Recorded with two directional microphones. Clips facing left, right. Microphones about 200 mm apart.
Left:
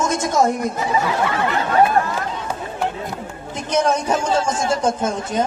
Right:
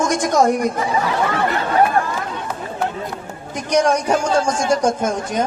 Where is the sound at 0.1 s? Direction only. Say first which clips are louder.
Right 2 dB; 15° right (ahead or behind).